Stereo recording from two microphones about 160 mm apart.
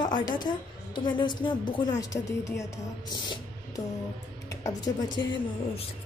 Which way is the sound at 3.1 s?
30° left (ahead or behind).